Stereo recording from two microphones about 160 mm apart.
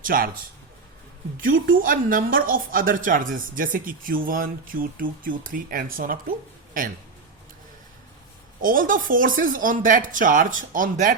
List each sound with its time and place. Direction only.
0.0 s speech: 60° right (ahead or behind)
1.4 s a woman's voice: 60° right (ahead or behind)
8.6 s a woman's voice: 60° right (ahead or behind)